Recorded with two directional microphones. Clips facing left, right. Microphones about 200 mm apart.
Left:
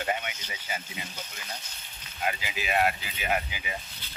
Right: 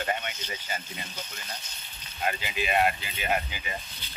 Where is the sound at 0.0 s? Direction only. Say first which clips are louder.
Even; 10° left (ahead or behind).